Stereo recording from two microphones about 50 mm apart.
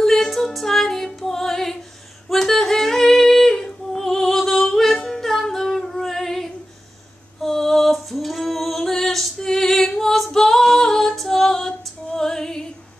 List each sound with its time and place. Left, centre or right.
0.0 s female singing: centre
2.3 s yodeling: centre
7.4 s female singing: centre